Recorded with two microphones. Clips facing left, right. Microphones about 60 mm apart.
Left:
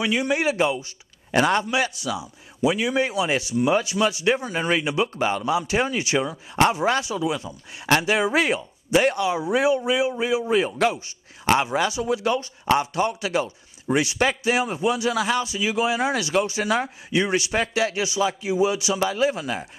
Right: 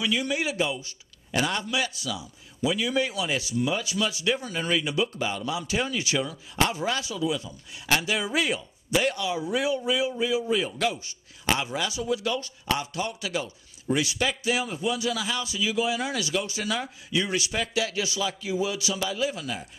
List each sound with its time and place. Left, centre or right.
0.0 s speech: left
5.4 s speech: left
15.4 s speech: left
18.0 s speech: left
19.0 s speech: left